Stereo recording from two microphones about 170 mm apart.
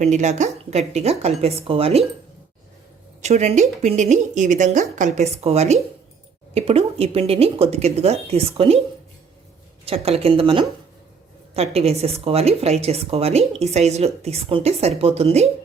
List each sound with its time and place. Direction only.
0.0 s speech: 45° right (ahead or behind)
3.2 s a woman's voice: 40° right (ahead or behind)
9.8 s speech: 35° right (ahead or behind)